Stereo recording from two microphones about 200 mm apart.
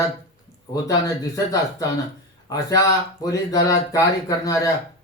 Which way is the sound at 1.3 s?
15° left (ahead or behind).